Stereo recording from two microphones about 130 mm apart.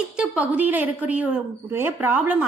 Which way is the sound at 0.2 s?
10° right (ahead or behind).